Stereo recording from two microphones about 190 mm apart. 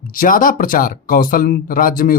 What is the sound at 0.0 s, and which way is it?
Speech, 45° left (ahead or behind).